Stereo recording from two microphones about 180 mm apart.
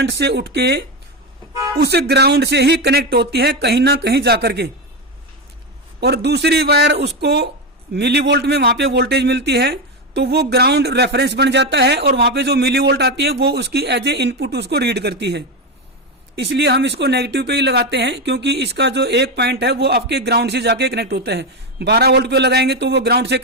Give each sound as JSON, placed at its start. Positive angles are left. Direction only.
{"t": 0.0, "sound": "speech", "side_deg": -65}
{"t": 6.0, "sound": "speech", "side_deg": -65}